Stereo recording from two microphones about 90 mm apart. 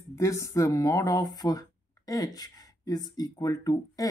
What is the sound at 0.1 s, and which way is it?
Speech, 35° left (ahead or behind).